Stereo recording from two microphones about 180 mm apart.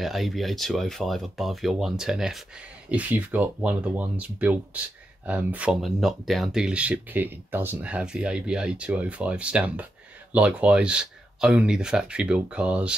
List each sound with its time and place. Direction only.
0.0 s speech: centre (ahead or behind)